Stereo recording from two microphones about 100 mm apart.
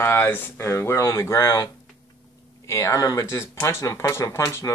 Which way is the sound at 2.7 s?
30° left (ahead or behind).